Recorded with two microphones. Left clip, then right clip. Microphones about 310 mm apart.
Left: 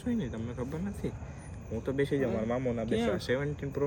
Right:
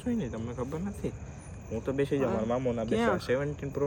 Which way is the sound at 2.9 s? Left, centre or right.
Centre.